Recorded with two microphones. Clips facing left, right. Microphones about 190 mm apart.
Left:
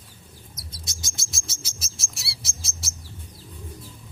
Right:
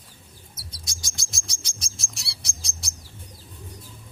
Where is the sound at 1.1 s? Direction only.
Centre (ahead or behind).